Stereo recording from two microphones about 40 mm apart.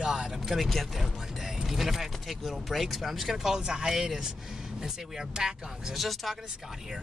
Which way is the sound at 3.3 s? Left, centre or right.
Centre.